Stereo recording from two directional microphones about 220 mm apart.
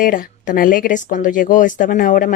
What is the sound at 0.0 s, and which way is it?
Speech, 40° left (ahead or behind).